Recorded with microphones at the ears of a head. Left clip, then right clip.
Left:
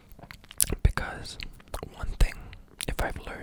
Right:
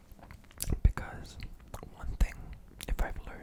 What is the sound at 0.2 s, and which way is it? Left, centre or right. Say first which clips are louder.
Whispering: left 12 dB; left.